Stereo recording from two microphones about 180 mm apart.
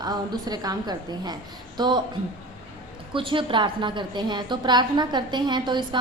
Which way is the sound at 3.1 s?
30° right (ahead or behind).